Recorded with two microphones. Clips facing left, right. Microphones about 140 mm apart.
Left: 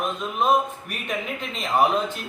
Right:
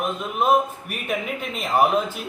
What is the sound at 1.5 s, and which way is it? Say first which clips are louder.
Speech: right 1 dB; 5° right (ahead or behind).